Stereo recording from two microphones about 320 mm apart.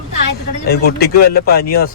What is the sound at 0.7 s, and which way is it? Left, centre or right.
Speech, left.